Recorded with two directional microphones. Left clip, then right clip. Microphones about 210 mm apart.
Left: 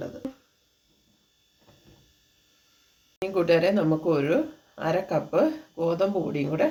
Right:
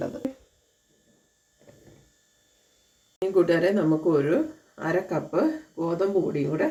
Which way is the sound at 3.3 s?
30° left (ahead or behind).